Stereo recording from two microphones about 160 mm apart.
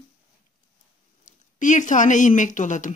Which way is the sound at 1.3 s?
55° left (ahead or behind).